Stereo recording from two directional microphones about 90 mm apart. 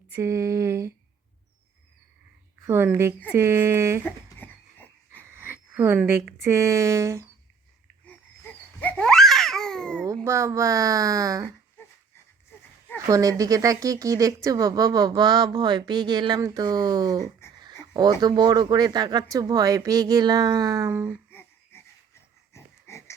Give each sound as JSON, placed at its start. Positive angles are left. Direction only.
{"t": 0.2, "sound": "speech", "side_deg": -35}
{"t": 2.6, "sound": "speech", "side_deg": -25}
{"t": 4.4, "sound": "dog", "side_deg": 20}
{"t": 5.2, "sound": "speech", "side_deg": -25}
{"t": 8.0, "sound": "a sound", "side_deg": 20}
{"t": 9.0, "sound": "babbling", "side_deg": 5}
{"t": 10.2, "sound": "speech", "side_deg": -30}
{"t": 11.8, "sound": "a sound", "side_deg": 25}
{"t": 13.1, "sound": "speech", "side_deg": -40}
{"t": 16.4, "sound": "speech", "side_deg": -35}
{"t": 16.6, "sound": "speech", "side_deg": -50}
{"t": 21.2, "sound": "a sound", "side_deg": 25}
{"t": 22.5, "sound": "pig", "side_deg": 30}